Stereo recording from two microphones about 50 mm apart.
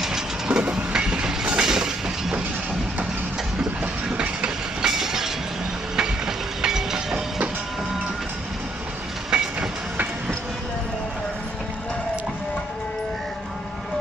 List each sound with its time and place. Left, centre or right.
0.0 s train: centre
3.8 s train: right
4.9 s train: centre
9.3 s train: centre